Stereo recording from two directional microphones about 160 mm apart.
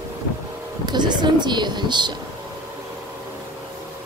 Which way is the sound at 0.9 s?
25° right (ahead or behind).